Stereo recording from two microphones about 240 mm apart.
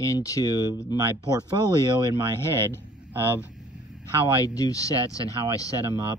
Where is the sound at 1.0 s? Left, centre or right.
Centre.